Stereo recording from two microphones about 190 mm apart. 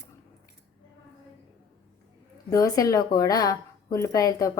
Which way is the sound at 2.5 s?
20° left (ahead or behind).